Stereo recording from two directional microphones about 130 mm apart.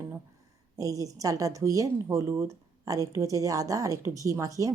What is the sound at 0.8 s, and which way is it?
A woman's voice, 25° right (ahead or behind).